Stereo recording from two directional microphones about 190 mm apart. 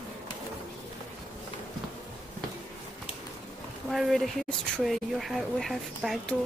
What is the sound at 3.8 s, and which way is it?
A woman's voice, centre (ahead or behind).